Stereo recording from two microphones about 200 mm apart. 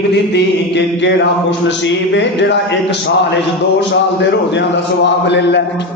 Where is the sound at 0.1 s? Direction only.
60° left (ahead or behind).